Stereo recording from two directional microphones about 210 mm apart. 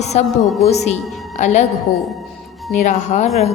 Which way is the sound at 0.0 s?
30° left (ahead or behind).